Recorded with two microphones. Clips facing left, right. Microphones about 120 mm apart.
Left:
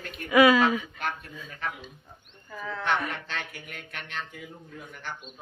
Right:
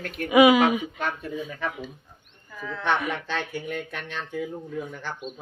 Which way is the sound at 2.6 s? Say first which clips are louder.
Even; 10° left (ahead or behind).